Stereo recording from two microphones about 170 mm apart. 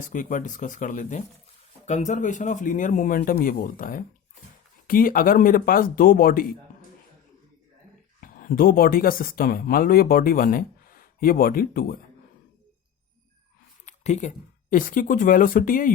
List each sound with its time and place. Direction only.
0.0 s speech: 50° left (ahead or behind)
8.2 s speech: 55° left (ahead or behind)
13.8 s speech: 45° left (ahead or behind)